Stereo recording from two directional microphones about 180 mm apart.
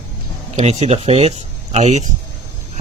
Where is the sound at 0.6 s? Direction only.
35° right (ahead or behind).